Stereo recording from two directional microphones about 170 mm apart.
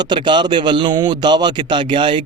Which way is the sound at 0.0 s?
25° right (ahead or behind).